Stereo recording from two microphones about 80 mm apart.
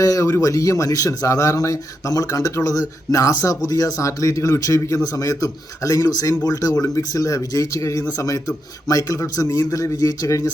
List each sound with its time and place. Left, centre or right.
0.0 s a man's voice: left